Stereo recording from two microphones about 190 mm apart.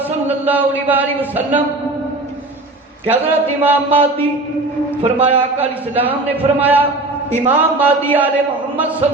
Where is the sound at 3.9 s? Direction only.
30° right (ahead or behind).